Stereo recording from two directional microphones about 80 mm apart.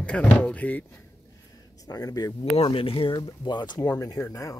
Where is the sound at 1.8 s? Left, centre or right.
Left.